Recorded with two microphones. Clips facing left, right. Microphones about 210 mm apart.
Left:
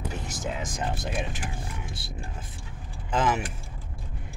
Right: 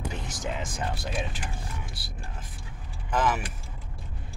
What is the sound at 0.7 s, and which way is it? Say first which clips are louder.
Speech: left 1 dB; 20° left (ahead or behind).